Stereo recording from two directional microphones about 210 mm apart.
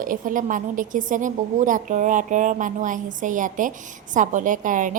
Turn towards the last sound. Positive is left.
turn(degrees=-40)  # may be behind; listen again after turning